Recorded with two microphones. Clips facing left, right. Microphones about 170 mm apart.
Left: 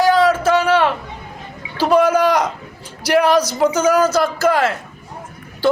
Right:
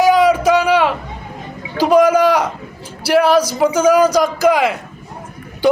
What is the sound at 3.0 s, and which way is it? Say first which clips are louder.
A man's voice: right 2 dB; 5° right (ahead or behind).